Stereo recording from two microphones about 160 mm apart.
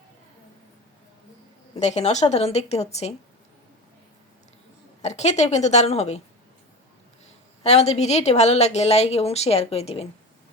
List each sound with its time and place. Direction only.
1.7 s a woman's voice: 45° left (ahead or behind)
5.0 s a woman's voice: 45° left (ahead or behind)
7.6 s a woman's voice: 40° left (ahead or behind)